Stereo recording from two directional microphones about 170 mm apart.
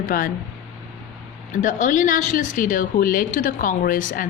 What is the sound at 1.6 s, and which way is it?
Speech, 50° left (ahead or behind).